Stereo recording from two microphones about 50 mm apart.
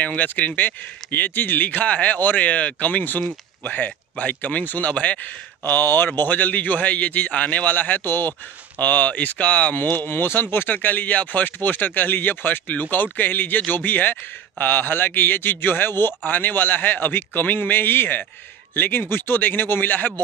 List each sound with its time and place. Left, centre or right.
0.0 s a man's voice: left
5.6 s a man's voice: left
9.8 s a man's voice: left